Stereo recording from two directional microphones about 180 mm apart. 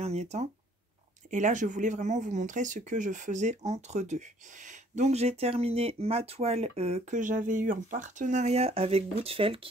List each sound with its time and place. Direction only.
0.0 s speech: 35° right (ahead or behind)